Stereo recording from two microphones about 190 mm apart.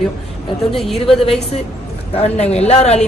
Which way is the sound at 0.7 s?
Centre (ahead or behind).